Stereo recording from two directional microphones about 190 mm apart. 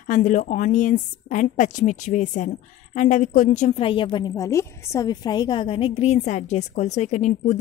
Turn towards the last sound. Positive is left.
turn(degrees=40)  # may be behind; listen again after turning